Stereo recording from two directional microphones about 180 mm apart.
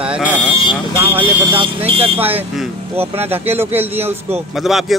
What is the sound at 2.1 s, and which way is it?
Speech, 10° right (ahead or behind).